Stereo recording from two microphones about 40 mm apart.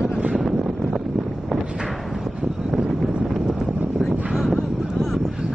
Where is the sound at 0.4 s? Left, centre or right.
Centre.